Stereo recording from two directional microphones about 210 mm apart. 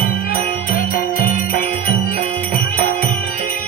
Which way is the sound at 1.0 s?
40° left (ahead or behind).